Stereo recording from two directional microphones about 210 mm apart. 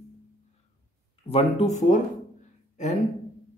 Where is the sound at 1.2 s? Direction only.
30° left (ahead or behind).